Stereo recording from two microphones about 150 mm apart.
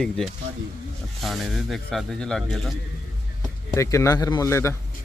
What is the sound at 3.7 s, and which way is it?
A man's voice, 20° left (ahead or behind).